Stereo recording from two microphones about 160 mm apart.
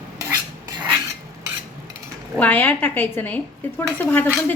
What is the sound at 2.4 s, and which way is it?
Speech, 10° left (ahead or behind).